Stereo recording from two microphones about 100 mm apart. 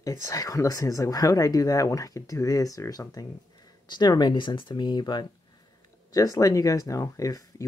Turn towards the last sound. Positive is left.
turn(degrees=35)  # may be behind; listen again after turning